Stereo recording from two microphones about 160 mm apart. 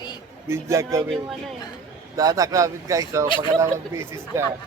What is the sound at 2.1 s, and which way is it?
Speech, 20° right (ahead or behind).